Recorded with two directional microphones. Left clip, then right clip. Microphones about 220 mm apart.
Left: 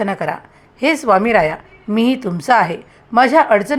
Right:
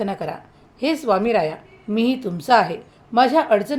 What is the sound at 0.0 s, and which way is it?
A woman's voice, 20° left (ahead or behind).